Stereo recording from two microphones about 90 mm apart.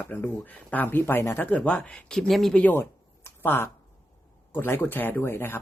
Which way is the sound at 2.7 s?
25° left (ahead or behind).